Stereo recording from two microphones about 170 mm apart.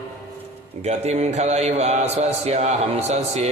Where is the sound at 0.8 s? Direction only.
40° right (ahead or behind).